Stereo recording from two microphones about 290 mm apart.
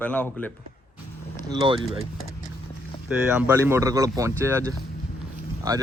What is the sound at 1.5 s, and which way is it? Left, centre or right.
Speech, centre.